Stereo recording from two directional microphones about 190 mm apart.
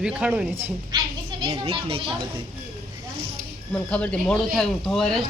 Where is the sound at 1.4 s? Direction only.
25° right (ahead or behind).